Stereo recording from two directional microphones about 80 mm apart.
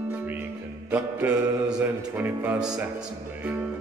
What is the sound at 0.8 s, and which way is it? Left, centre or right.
Music, centre.